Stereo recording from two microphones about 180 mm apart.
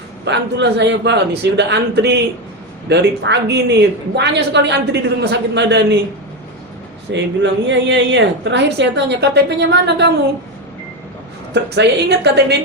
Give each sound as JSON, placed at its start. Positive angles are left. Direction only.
{"t": 0.3, "sound": "speech", "side_deg": -70}
{"t": 7.1, "sound": "a woman's voice", "side_deg": -80}
{"t": 11.5, "sound": "speech", "side_deg": -70}